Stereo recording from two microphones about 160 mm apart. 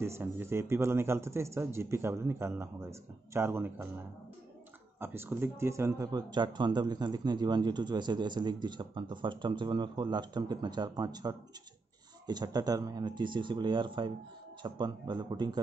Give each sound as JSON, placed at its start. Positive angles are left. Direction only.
{"t": 0.0, "sound": "speech", "side_deg": -15}
{"t": 5.0, "sound": "speech", "side_deg": -15}